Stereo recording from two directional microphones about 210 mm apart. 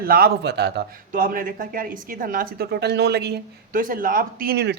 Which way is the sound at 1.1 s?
40° right (ahead or behind).